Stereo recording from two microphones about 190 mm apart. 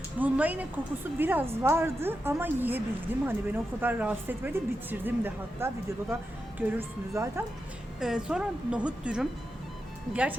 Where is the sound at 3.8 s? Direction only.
10° right (ahead or behind).